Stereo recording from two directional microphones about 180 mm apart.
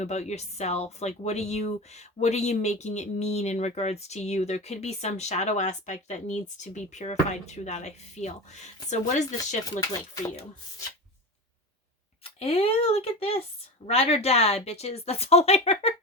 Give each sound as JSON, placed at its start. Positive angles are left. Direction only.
{"t": 0.0, "sound": "speech", "side_deg": 40}
{"t": 12.4, "sound": "speech", "side_deg": 30}